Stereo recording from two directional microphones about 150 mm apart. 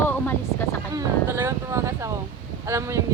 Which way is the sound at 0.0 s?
15° left (ahead or behind).